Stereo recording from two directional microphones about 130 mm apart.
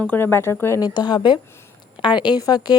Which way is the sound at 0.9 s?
35° left (ahead or behind).